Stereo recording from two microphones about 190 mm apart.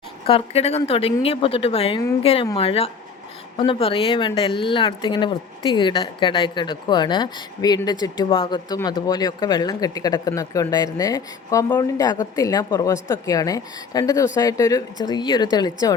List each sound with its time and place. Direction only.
0.3 s a woman's voice: 30° left (ahead or behind)